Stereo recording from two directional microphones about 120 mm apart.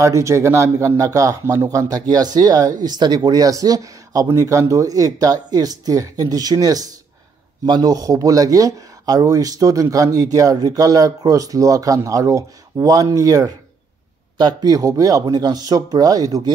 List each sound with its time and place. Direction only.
0.0 s speech: 25° right (ahead or behind)